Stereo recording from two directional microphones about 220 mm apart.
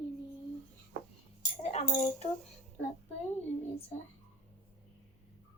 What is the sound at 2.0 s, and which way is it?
Speech, 30° left (ahead or behind).